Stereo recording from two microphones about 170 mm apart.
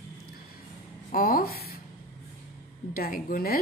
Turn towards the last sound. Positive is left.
turn(degrees=55)  # may be behind; listen again after turning